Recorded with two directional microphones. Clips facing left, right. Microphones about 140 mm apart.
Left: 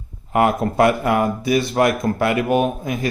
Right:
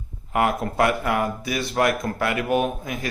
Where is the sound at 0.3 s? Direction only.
30° left (ahead or behind).